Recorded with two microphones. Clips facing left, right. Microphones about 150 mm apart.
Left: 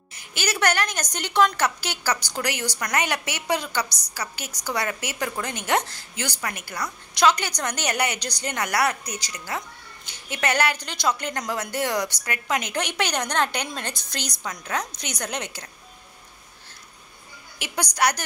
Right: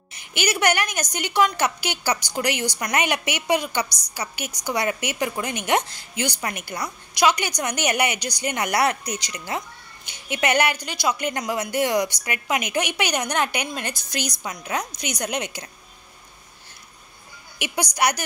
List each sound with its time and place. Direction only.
0.1 s a woman's voice: 20° right (ahead or behind)
17.9 s speech: 15° right (ahead or behind)